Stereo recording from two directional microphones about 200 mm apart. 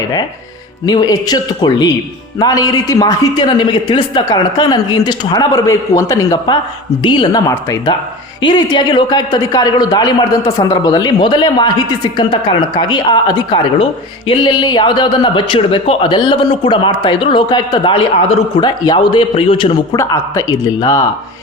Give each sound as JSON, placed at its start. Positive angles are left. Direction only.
{"t": 0.9, "sound": "a man's voice", "side_deg": 20}